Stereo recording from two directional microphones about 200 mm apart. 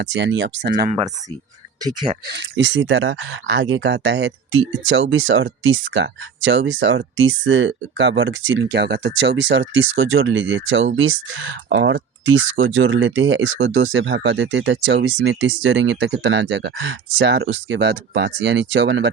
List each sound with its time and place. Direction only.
0.0 s speech: 65° right (ahead or behind)
0.7 s speech: 45° right (ahead or behind)
1.8 s speech: 20° right (ahead or behind)
2.2 s speech: 60° right (ahead or behind)
4.9 s speech: 75° right (ahead or behind)